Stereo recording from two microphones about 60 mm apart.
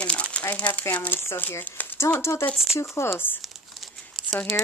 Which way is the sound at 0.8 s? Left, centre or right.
Left.